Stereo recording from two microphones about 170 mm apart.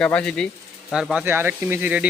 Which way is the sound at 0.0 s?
5° left (ahead or behind).